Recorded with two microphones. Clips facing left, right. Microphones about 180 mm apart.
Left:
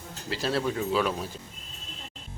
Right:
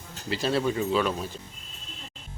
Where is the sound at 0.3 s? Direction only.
Centre (ahead or behind).